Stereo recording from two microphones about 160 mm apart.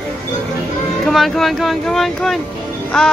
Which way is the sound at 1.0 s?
Centre (ahead or behind).